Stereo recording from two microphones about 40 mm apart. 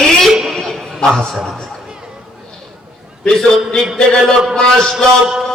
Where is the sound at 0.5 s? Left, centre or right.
Centre.